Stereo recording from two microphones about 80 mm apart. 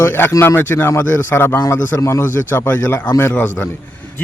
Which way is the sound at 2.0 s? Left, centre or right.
Left.